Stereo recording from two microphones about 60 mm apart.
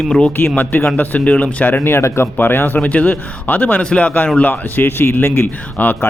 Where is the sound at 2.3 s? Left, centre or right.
Left.